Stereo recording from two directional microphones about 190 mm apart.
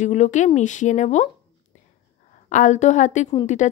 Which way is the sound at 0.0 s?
40° left (ahead or behind).